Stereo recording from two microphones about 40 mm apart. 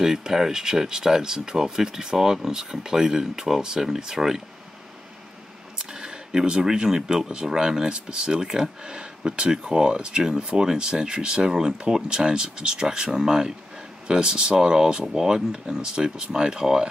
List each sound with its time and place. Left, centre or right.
0.0 s speech: centre
5.8 s speech: centre